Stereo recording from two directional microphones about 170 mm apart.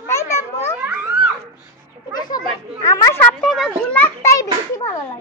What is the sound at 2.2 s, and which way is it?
A child's voice, 20° left (ahead or behind).